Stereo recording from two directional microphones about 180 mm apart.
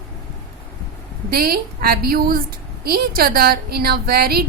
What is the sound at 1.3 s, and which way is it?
A woman's voice, 55° right (ahead or behind).